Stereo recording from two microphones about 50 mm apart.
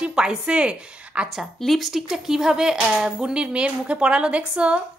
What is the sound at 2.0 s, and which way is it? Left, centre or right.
Speech, centre.